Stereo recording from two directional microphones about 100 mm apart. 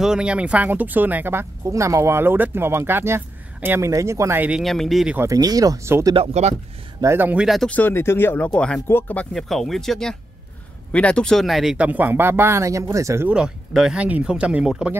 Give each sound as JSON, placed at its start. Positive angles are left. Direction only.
{"t": 0.0, "sound": "speech", "side_deg": -10}
{"t": 4.6, "sound": "speech", "side_deg": 0}
{"t": 5.2, "sound": "speech", "side_deg": -35}
{"t": 6.1, "sound": "speech", "side_deg": -80}
{"t": 7.0, "sound": "speech", "side_deg": -25}
{"t": 7.4, "sound": "speech", "side_deg": 0}
{"t": 7.7, "sound": "speech", "side_deg": 20}
{"t": 8.5, "sound": "speech", "side_deg": 10}
{"t": 9.3, "sound": "speech", "side_deg": 5}
{"t": 13.3, "sound": "speech", "side_deg": -5}